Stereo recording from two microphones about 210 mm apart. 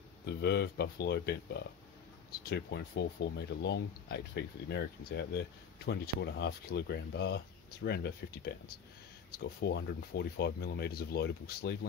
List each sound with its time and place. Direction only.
0.3 s speech: 50° left (ahead or behind)